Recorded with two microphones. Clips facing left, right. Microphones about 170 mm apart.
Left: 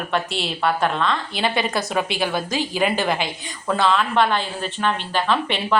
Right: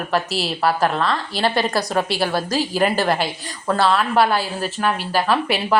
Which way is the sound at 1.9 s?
35° right (ahead or behind).